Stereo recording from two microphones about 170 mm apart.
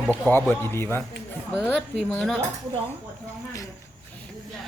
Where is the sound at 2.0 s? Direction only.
5° left (ahead or behind).